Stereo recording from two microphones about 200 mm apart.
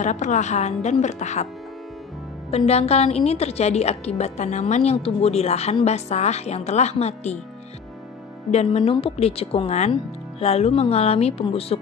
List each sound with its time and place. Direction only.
0.0 s a woman's voice: 35° left (ahead or behind)
2.5 s a woman's voice: 30° left (ahead or behind)
8.5 s a woman's voice: 30° left (ahead or behind)